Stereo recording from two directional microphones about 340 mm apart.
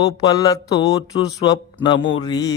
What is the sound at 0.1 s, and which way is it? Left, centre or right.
Speech, centre.